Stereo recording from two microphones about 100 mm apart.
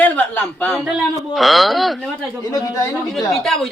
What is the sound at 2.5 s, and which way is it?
Speech, 35° left (ahead or behind).